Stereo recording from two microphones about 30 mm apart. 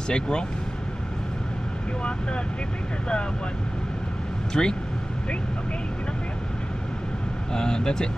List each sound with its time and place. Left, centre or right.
0.1 s speech: left
4.6 s speech: left
7.5 s speech: left